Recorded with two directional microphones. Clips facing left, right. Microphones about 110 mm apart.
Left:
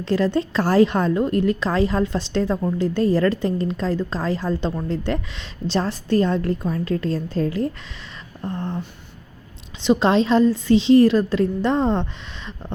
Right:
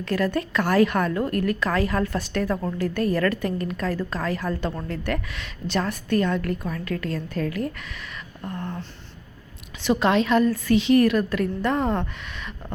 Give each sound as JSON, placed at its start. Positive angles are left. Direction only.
{"t": 0.0, "sound": "a woman's voice", "side_deg": 25}
{"t": 9.8, "sound": "a woman's voice", "side_deg": 25}